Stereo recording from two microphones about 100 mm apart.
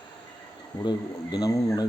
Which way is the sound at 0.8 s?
45° left (ahead or behind).